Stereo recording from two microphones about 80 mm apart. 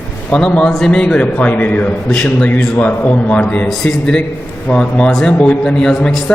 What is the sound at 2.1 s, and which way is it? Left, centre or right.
A man's voice, centre.